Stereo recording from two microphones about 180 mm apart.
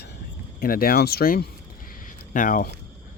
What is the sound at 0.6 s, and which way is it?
Speech, 55° left (ahead or behind).